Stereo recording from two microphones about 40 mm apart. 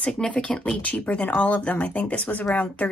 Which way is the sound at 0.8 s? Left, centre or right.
Left.